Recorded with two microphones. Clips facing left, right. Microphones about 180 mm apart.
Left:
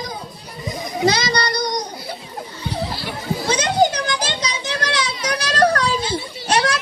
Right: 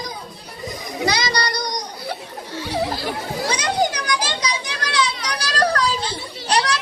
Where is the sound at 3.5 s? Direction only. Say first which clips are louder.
Left 4 dB; 25° left (ahead or behind).